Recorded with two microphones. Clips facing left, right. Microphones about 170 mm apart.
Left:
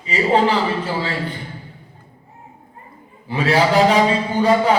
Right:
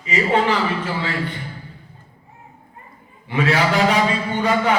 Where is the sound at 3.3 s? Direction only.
30° left (ahead or behind).